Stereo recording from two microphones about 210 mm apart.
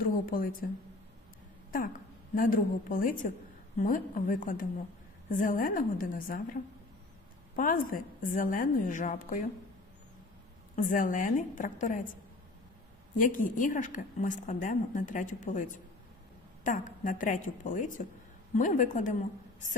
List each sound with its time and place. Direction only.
0.0 s a woman's voice: 40° left (ahead or behind)
2.3 s a woman's voice: 40° left (ahead or behind)
10.8 s a woman's voice: 40° left (ahead or behind)
13.1 s a woman's voice: 40° left (ahead or behind)